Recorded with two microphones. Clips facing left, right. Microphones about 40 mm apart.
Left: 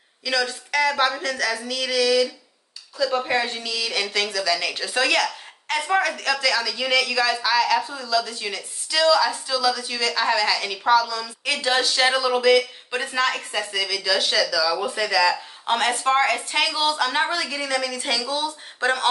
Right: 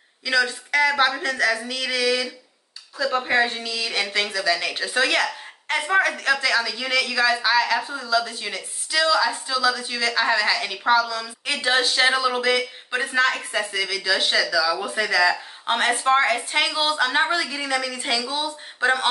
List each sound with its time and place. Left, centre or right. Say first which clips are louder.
0.2 s speech: right 3 dB; centre